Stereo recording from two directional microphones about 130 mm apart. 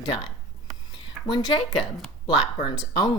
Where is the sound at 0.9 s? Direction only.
40° left (ahead or behind).